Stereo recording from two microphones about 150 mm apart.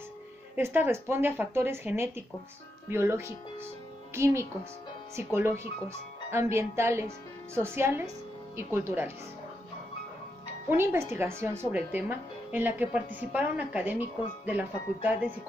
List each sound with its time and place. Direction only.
0.6 s a woman's voice: 15° right (ahead or behind)
10.7 s a woman's voice: 15° right (ahead or behind)